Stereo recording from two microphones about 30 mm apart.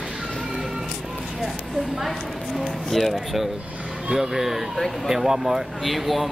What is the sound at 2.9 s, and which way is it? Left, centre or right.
Speech, centre.